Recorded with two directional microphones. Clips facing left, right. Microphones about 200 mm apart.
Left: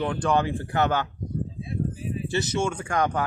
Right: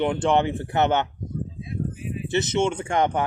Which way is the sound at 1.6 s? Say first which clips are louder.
Left 1 dB; 30° left (ahead or behind).